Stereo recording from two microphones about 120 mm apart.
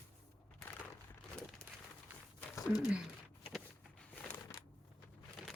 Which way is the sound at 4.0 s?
10° left (ahead or behind).